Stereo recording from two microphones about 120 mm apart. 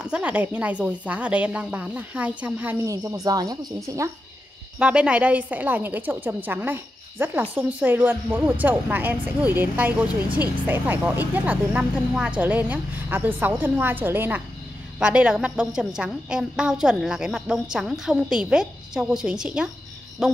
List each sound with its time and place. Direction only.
0.0 s speech: 10° right (ahead or behind)
3.1 s speech: 30° right (ahead or behind)
4.7 s a woman's voice: 10° right (ahead or behind)